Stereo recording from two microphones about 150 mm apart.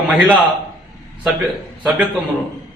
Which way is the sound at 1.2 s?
Centre (ahead or behind).